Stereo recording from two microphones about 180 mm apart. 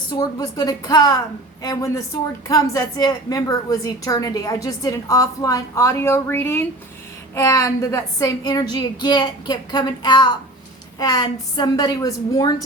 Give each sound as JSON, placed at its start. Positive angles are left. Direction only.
{"t": 0.2, "sound": "a woman's voice", "side_deg": 20}